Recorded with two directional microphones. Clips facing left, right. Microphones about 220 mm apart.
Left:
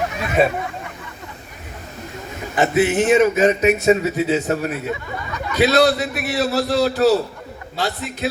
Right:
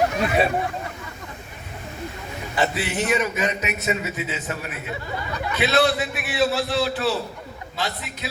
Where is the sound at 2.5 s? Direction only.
50° left (ahead or behind).